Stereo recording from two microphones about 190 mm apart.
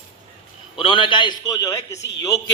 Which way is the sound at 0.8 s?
25° left (ahead or behind).